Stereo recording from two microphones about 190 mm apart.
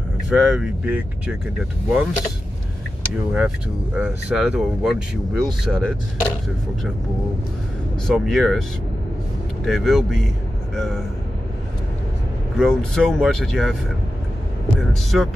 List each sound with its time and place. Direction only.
0.3 s speech: centre (ahead or behind)
3.3 s speech: 5° right (ahead or behind)
8.1 s speech: centre (ahead or behind)
9.7 s speech: centre (ahead or behind)
12.5 s speech: 5° left (ahead or behind)
14.8 s speech: centre (ahead or behind)